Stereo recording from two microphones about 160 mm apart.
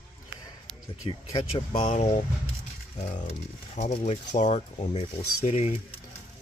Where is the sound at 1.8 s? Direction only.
45° left (ahead or behind).